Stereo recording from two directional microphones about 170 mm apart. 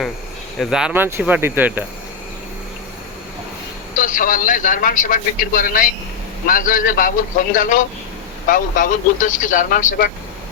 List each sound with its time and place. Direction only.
0.6 s speech: 5° right (ahead or behind)
3.9 s a man's voice: 50° left (ahead or behind)